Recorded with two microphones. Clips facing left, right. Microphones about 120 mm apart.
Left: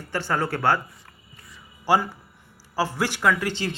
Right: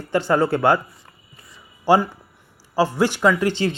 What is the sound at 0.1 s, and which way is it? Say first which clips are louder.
Speech: right 7 dB; 15° right (ahead or behind).